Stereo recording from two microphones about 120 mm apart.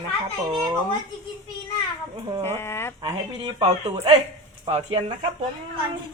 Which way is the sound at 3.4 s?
45° right (ahead or behind).